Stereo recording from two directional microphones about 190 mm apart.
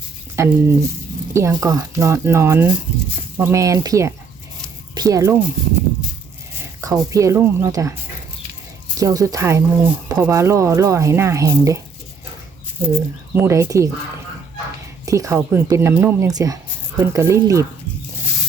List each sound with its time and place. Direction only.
0.3 s speech: 15° right (ahead or behind)
6.8 s speech: 15° right (ahead or behind)
9.0 s speech: 15° right (ahead or behind)
12.8 s speech: 10° right (ahead or behind)
15.0 s speech: 15° right (ahead or behind)